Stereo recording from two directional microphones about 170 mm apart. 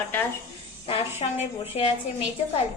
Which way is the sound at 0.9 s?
35° left (ahead or behind).